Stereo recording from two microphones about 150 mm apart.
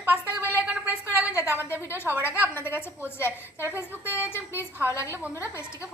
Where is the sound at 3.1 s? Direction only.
15° left (ahead or behind).